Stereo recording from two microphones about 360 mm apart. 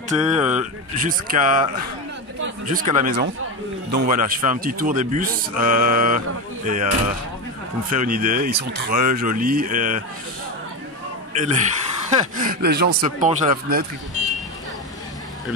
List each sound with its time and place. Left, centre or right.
0.3 s speech: centre
0.6 s speech: right
11.3 s speech: centre